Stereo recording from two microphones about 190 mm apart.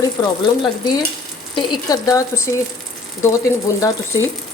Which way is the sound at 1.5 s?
20° left (ahead or behind).